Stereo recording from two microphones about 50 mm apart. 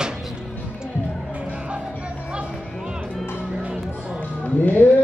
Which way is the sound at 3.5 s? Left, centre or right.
Right.